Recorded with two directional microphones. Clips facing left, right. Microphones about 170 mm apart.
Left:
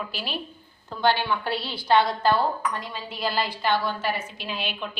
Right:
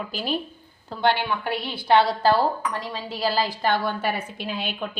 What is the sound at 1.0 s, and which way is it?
A woman's voice, 25° right (ahead or behind).